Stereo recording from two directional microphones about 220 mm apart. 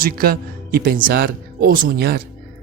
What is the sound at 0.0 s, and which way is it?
Speech, 40° right (ahead or behind).